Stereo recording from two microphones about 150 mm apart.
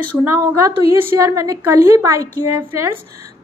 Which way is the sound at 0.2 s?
15° right (ahead or behind).